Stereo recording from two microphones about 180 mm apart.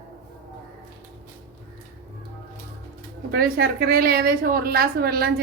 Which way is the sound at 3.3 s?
60° right (ahead or behind).